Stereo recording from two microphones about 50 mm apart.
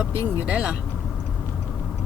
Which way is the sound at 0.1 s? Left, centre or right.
Left.